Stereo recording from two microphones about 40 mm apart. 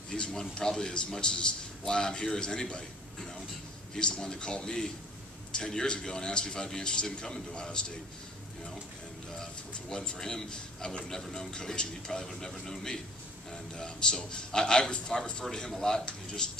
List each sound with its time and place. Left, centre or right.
0.1 s a man's voice: centre
3.9 s a man's voice: centre
9.3 s a man's voice: centre